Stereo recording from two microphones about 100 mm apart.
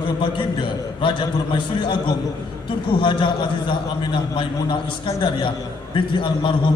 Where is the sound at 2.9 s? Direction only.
50° left (ahead or behind).